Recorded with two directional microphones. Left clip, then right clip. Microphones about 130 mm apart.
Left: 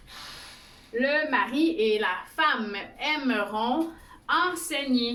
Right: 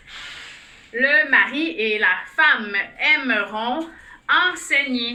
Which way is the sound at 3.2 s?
10° left (ahead or behind).